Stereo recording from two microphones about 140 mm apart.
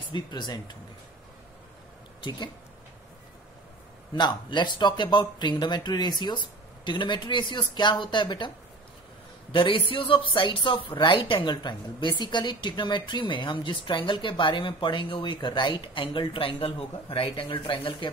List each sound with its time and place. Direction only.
0.1 s speech: 30° left (ahead or behind)
4.1 s speech: 35° left (ahead or behind)
9.5 s speech: 35° left (ahead or behind)